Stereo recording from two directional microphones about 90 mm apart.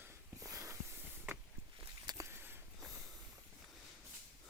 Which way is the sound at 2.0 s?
40° right (ahead or behind).